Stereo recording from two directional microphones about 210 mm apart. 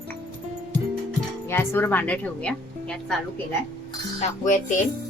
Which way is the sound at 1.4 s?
10° left (ahead or behind).